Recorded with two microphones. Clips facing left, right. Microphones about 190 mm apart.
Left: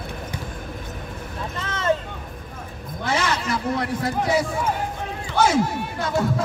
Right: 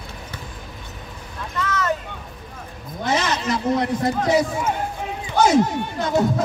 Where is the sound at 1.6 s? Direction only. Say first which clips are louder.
Even; 30° left (ahead or behind).